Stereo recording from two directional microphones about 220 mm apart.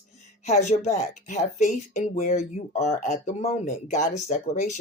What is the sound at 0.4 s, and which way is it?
Speech, 30° left (ahead or behind).